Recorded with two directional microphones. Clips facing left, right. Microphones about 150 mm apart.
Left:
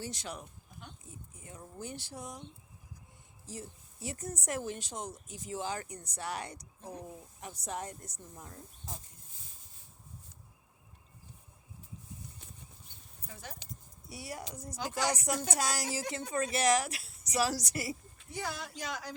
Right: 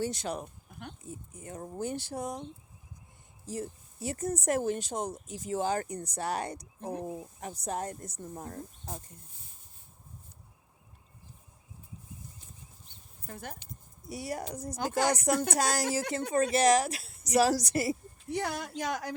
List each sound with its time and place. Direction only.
0.0 s speech: 50° right (ahead or behind)
3.4 s speech: 50° right (ahead or behind)
9.3 s a sound: 90° left
13.2 s speech: 55° right (ahead or behind)
16.3 s speech: 35° right (ahead or behind)
17.3 s speech: 50° right (ahead or behind)
18.3 s speech: 65° right (ahead or behind)